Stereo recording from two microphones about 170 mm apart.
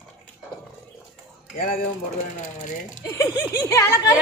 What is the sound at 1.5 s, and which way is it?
Speech, 60° left (ahead or behind).